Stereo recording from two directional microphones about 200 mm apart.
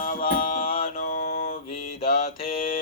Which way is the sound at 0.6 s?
30° left (ahead or behind).